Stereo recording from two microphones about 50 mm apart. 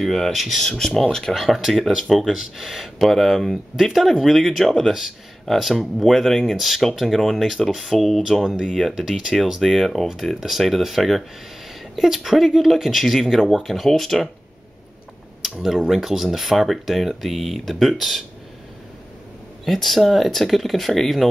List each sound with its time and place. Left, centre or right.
0.0 s speech: centre
0.6 s speech: centre
1.3 s speech: centre
8.3 s speech: centre
8.5 s speech: centre
15.6 s speech: centre
19.6 s speech: centre